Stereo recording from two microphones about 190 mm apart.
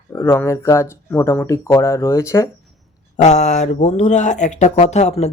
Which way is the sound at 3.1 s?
35° left (ahead or behind).